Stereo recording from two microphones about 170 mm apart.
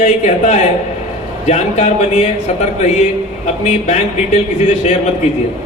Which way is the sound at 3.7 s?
40° left (ahead or behind).